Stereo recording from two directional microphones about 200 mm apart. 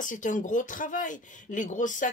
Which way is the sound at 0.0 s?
40° left (ahead or behind).